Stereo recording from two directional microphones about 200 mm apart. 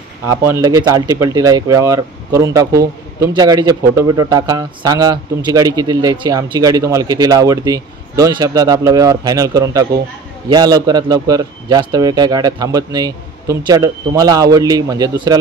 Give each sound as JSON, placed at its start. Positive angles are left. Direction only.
{"t": 0.5, "sound": "a man's voice", "side_deg": -15}